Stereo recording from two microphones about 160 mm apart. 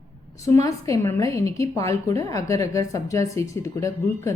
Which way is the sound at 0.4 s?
20° left (ahead or behind).